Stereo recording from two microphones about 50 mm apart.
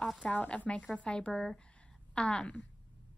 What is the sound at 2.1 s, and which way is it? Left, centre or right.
Speech, left.